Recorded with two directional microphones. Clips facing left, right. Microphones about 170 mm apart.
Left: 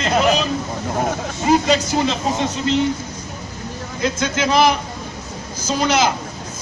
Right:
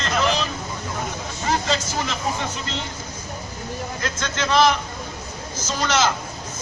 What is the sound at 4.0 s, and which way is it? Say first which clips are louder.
A man's voice: left 9 dB; 15° left (ahead or behind).